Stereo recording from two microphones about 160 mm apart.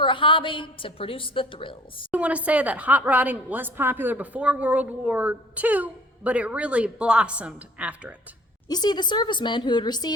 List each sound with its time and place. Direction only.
0.0 s a woman's voice: 30° left (ahead or behind)
2.1 s a woman's voice: 10° right (ahead or behind)
8.6 s a woman's voice: 25° left (ahead or behind)